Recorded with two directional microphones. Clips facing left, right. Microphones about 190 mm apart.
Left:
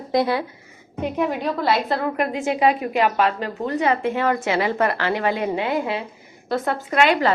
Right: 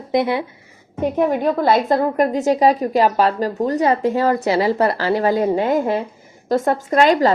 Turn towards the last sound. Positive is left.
turn(degrees=-40)  # may be behind; listen again after turning